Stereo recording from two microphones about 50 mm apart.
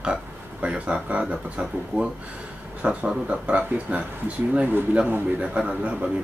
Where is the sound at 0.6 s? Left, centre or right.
Right.